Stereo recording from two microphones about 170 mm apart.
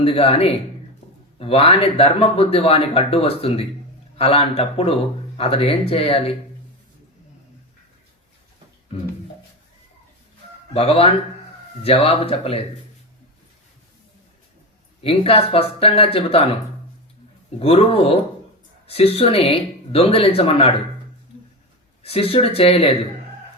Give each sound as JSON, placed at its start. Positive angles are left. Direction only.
{"t": 0.0, "sound": "speech", "side_deg": 35}
{"t": 10.8, "sound": "speech", "side_deg": 35}
{"t": 15.0, "sound": "speech", "side_deg": 35}
{"t": 17.6, "sound": "speech", "side_deg": 35}
{"t": 22.0, "sound": "speech", "side_deg": 35}